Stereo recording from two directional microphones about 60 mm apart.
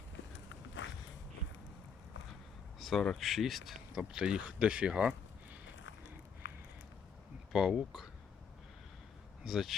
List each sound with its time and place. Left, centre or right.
2.7 s speech: centre
4.1 s speech: centre
7.5 s speech: centre
9.4 s speech: centre